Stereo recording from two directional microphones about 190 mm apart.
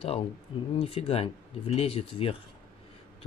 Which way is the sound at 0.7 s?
30° left (ahead or behind).